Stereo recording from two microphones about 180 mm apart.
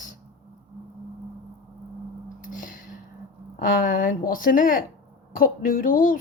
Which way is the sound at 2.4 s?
45° left (ahead or behind).